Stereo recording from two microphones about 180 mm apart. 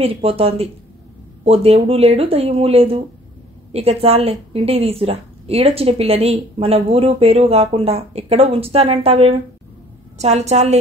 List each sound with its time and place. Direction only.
0.0 s a woman's voice: 30° right (ahead or behind)